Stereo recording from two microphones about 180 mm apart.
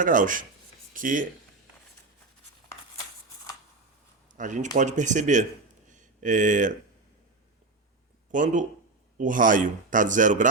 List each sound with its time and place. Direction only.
0.0 s speech: 45° right (ahead or behind)
4.3 s speech: 45° right (ahead or behind)
5.9 s a sound: 45° right (ahead or behind)
8.3 s speech: 45° right (ahead or behind)